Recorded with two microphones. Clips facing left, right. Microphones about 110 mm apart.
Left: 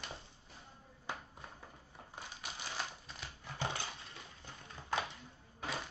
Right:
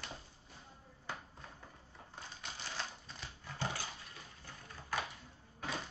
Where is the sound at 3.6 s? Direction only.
25° left (ahead or behind).